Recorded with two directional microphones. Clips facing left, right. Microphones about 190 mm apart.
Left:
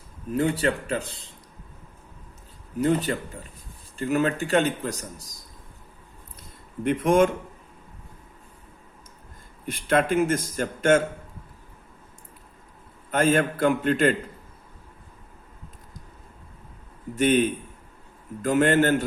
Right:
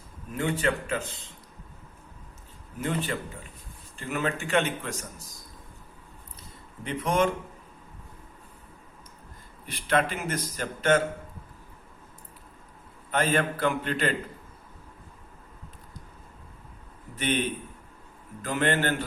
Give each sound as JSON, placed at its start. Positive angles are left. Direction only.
{"t": 0.3, "sound": "speech", "side_deg": 35}
{"t": 2.8, "sound": "speech", "side_deg": 40}
{"t": 6.8, "sound": "a man's voice", "side_deg": 50}
{"t": 9.6, "sound": "a man's voice", "side_deg": 50}
{"t": 13.1, "sound": "a man's voice", "side_deg": 45}
{"t": 17.2, "sound": "a man's voice", "side_deg": 45}